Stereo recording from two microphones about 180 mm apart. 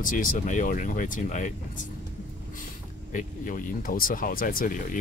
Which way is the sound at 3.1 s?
45° left (ahead or behind).